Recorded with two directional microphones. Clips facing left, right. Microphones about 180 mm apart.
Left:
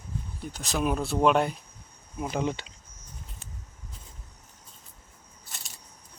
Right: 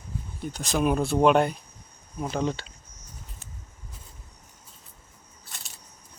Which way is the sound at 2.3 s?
15° left (ahead or behind).